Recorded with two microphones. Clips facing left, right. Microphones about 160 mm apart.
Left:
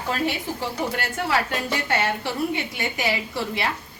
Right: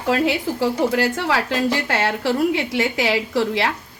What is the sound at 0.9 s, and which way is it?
A woman's voice, 90° right.